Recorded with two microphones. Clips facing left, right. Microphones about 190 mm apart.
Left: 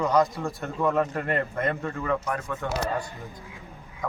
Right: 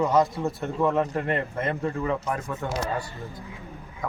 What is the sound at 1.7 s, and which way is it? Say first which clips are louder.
Speech: right 1 dB; 25° right (ahead or behind).